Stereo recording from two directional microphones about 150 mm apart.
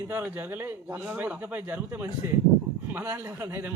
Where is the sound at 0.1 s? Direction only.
15° right (ahead or behind).